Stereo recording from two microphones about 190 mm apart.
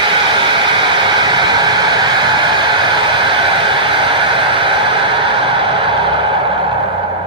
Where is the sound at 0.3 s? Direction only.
25° right (ahead or behind).